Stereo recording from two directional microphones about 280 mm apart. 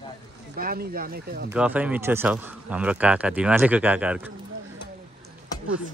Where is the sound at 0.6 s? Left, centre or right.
Right.